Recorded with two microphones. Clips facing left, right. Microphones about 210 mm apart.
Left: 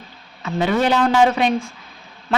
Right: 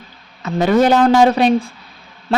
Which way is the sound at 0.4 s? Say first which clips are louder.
Right 5 dB; 40° right (ahead or behind).